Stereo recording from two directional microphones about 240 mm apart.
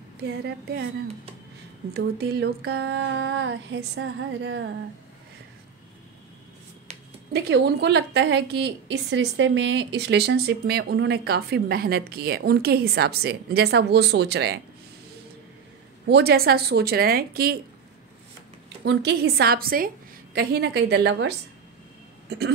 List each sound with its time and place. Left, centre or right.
0.2 s a woman's voice: right
2.0 s a woman's voice: right
7.3 s a woman's voice: right
16.1 s a woman's voice: right
18.9 s a woman's voice: right